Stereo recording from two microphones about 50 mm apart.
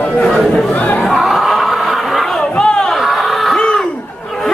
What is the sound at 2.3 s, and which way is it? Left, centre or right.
Chatter, centre.